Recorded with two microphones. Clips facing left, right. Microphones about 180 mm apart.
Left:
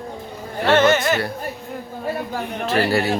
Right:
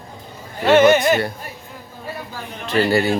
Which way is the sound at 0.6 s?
15° right (ahead or behind).